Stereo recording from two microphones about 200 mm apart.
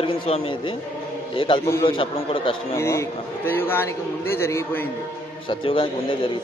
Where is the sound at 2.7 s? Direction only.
15° left (ahead or behind).